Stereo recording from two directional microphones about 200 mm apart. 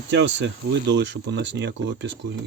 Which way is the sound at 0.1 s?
65° right (ahead or behind).